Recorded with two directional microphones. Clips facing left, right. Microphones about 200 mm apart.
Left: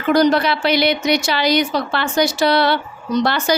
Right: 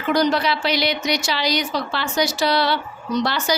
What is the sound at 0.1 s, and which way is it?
A woman's voice, 55° left (ahead or behind).